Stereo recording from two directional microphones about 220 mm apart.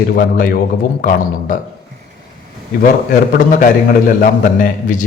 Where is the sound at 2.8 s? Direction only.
40° left (ahead or behind).